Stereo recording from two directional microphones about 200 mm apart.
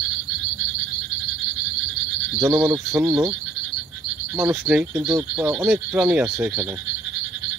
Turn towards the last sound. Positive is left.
turn(degrees=-10)  # may be behind; listen again after turning